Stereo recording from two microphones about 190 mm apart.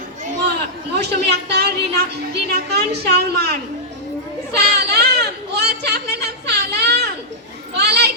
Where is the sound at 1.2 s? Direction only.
60° right (ahead or behind).